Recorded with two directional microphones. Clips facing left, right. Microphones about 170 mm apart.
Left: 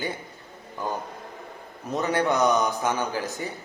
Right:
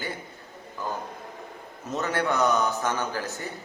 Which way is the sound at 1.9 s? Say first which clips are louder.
Left 3 dB; 15° left (ahead or behind).